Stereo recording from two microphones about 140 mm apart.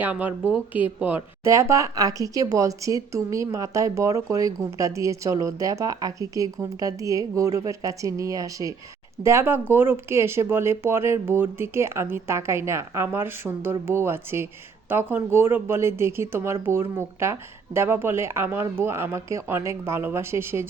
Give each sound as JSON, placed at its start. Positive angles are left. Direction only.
{"t": 0.0, "sound": "a woman's voice", "side_deg": -10}